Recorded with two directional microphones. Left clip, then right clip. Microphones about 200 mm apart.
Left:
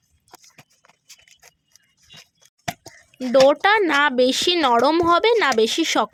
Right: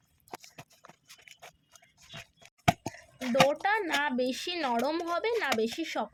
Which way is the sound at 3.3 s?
50° left (ahead or behind).